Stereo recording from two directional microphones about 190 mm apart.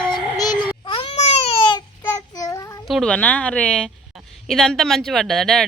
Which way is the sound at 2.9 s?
5° left (ahead or behind).